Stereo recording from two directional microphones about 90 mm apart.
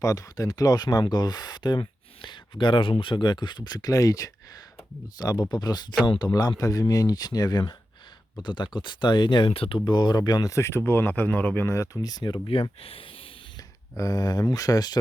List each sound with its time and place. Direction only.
0.0 s speech: 40° left (ahead or behind)
10.5 s speech: 30° left (ahead or behind)
12.0 s speech: 50° left (ahead or behind)
12.5 s speech: 90° left
13.9 s speech: 40° left (ahead or behind)